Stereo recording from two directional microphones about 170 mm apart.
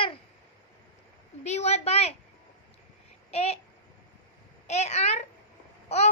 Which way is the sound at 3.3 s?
35° left (ahead or behind).